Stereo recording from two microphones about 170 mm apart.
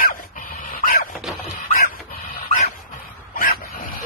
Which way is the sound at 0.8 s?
60° left (ahead or behind).